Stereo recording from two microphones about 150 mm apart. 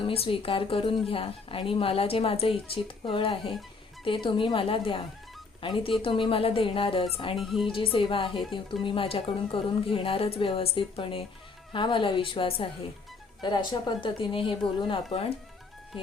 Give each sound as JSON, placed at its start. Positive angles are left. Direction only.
{"t": 0.0, "sound": "speech", "side_deg": 40}
{"t": 7.3, "sound": "speech", "side_deg": 0}
{"t": 7.7, "sound": "speech", "side_deg": 35}